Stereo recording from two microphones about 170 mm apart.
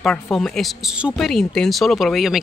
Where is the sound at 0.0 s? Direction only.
Centre (ahead or behind).